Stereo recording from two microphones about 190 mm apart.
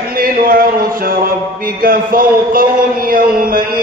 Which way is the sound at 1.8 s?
50° right (ahead or behind).